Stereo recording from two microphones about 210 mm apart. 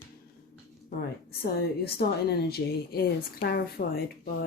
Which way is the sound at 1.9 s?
50° left (ahead or behind).